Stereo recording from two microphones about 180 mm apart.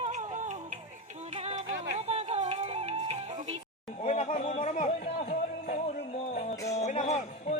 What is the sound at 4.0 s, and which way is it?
Music, 40° left (ahead or behind).